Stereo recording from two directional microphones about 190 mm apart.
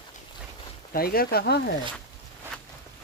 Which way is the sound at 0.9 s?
50° left (ahead or behind).